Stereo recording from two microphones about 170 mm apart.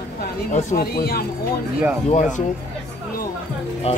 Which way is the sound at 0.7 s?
65° left (ahead or behind).